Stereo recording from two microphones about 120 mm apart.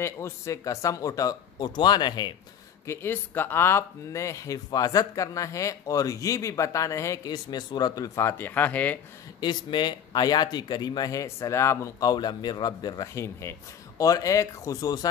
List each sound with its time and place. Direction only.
0.0 s speech: 25° left (ahead or behind)
2.9 s speech: 20° left (ahead or behind)
9.4 s a man's voice: 40° left (ahead or behind); by 11.9 s 20° left (ahead or behind)
12.0 s a man's voice: 35° left (ahead or behind)